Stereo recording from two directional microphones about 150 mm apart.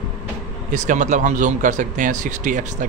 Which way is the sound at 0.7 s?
55° right (ahead or behind).